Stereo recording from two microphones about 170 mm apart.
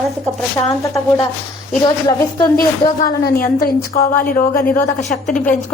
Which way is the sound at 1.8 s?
25° left (ahead or behind).